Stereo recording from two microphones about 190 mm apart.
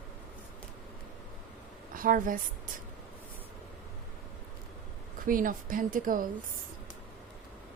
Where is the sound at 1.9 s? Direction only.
45° right (ahead or behind).